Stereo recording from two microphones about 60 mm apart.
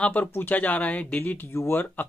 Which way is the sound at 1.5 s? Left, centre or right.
Left.